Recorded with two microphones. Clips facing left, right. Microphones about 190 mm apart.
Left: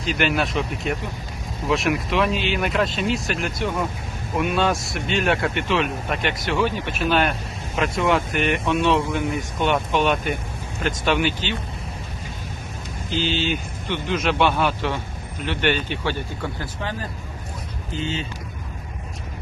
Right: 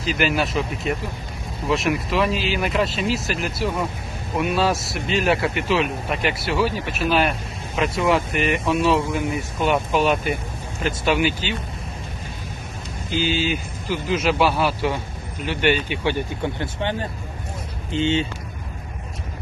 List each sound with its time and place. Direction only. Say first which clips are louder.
0.0 s speech: right 1 dB; centre (ahead or behind)
13.1 s speech: right 1 dB; 10° right (ahead or behind)
16.6 s speech: right 4 dB; 30° right (ahead or behind)